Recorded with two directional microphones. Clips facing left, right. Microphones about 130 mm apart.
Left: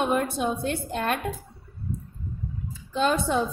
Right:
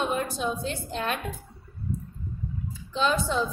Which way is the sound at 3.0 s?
55° left (ahead or behind).